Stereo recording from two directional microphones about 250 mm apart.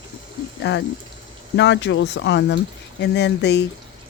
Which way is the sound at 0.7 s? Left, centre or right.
Left.